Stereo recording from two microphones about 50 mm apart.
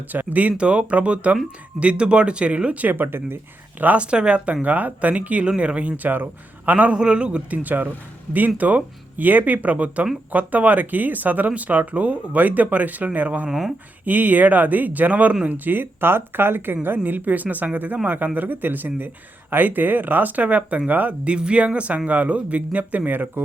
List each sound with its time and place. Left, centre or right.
0.1 s speech: right
2.9 s speech: right
3.8 s speech: right
4.6 s speech: right
6.9 s speech: centre
7.6 s speech: right
13.5 s speech: centre
14.0 s speech: right
21.2 s speech: right